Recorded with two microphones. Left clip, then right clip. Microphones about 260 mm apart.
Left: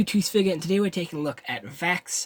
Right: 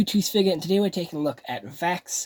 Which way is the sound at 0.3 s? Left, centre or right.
Centre.